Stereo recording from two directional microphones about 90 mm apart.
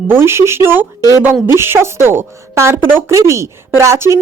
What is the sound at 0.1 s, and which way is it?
A woman's voice, 30° right (ahead or behind).